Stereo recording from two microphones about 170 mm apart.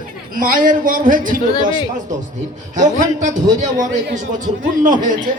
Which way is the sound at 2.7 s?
45° right (ahead or behind).